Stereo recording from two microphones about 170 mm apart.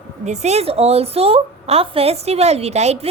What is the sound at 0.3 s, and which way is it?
A woman's voice, 40° right (ahead or behind).